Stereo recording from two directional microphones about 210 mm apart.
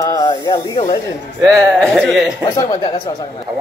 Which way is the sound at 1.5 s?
Centre (ahead or behind).